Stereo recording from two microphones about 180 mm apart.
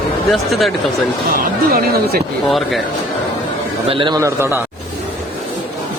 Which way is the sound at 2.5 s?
Centre (ahead or behind).